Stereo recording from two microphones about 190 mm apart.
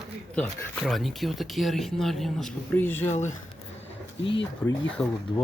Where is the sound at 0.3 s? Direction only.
5° left (ahead or behind).